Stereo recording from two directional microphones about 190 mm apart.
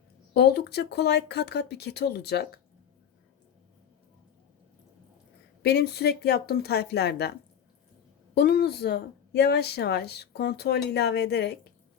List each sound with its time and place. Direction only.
0.3 s speech: 60° left (ahead or behind)
5.6 s speech: 60° left (ahead or behind)
8.4 s speech: 55° left (ahead or behind)